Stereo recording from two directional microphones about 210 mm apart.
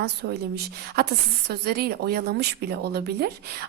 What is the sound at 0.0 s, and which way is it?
A woman's voice, 50° right (ahead or behind).